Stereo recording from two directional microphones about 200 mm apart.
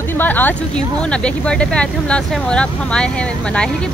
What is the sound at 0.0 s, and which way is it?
Speech, 10° left (ahead or behind).